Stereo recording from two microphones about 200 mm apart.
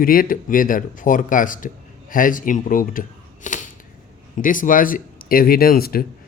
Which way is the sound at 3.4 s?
40° left (ahead or behind).